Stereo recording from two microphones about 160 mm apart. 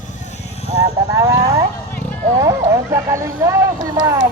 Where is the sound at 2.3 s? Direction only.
20° right (ahead or behind).